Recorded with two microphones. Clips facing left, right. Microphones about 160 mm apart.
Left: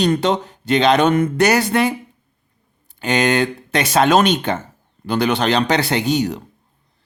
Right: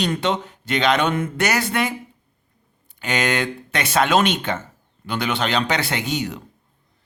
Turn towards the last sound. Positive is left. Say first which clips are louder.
# left 7 dB
turn(degrees=35)  # may be behind; listen again after turning